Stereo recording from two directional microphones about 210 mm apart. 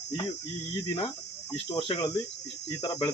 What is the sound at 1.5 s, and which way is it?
Speech, 25° left (ahead or behind).